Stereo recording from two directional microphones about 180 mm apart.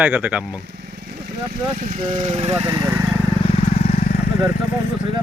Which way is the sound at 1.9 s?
40° right (ahead or behind).